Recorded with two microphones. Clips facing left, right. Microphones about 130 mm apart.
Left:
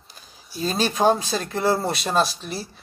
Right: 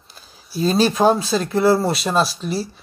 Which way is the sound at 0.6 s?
40° right (ahead or behind).